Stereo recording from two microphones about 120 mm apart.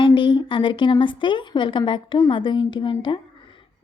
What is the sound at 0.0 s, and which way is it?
A woman's voice, 40° left (ahead or behind).